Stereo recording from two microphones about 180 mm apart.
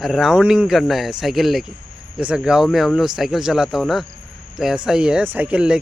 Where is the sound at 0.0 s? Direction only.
Centre (ahead or behind).